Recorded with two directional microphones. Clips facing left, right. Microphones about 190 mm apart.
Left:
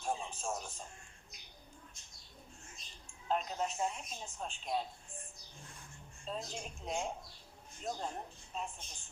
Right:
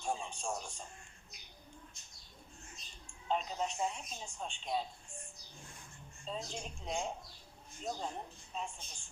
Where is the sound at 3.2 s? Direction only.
Centre (ahead or behind).